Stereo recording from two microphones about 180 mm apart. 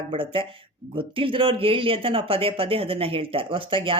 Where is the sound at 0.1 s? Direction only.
30° right (ahead or behind).